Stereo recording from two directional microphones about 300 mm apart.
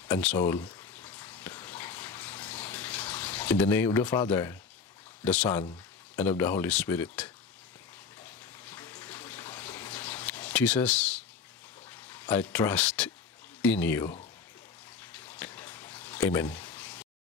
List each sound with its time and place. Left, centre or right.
0.1 s a sound: centre
5.2 s speech: centre
8.2 s bathtub: centre
11.9 s speech: centre
15.0 s bathtub: centre